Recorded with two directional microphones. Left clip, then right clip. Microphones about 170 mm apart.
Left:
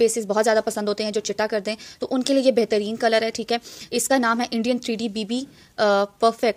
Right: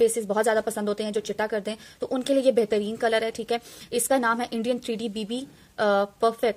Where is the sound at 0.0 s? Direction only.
25° left (ahead or behind).